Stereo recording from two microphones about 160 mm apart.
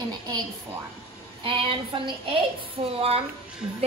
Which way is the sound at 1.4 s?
35° right (ahead or behind).